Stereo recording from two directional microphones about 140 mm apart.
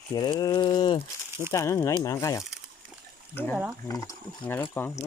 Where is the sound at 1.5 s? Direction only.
20° left (ahead or behind).